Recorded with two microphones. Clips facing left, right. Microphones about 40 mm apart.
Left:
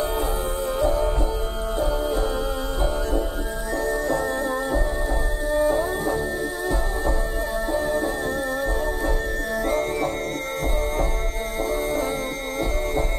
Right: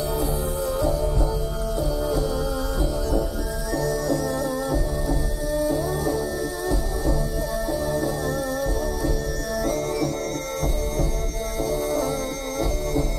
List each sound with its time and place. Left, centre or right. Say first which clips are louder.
0.7 s music: left 3 dB; left
7.7 s music: left 2 dB; left
9.7 s music: left 1 dB; left
11.6 s music: even; left